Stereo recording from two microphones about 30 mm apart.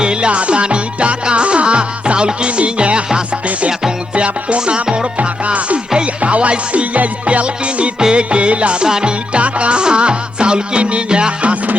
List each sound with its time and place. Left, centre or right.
0.0 s music: right
0.3 s music: right
6.2 s music: right
8.8 s music: right
9.3 s music: right